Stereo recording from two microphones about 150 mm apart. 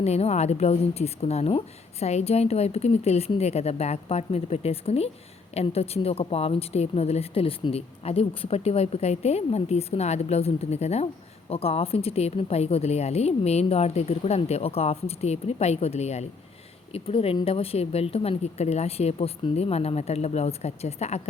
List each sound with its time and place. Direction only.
0.0 s speech: 45° left (ahead or behind)